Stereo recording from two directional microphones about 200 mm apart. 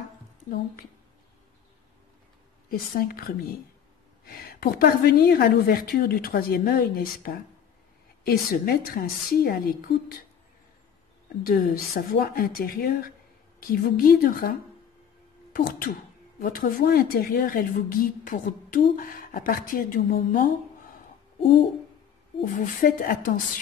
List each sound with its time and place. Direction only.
2.7 s speech: 45° left (ahead or behind)
4.4 s speech: 50° left (ahead or behind)
11.4 s speech: 45° left (ahead or behind)
15.5 s speech: 45° left (ahead or behind)
22.4 s speech: 45° left (ahead or behind)